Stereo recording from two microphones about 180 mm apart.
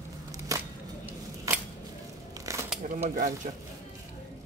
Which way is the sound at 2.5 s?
20° right (ahead or behind).